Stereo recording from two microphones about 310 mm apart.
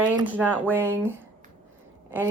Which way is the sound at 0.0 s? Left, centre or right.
Centre.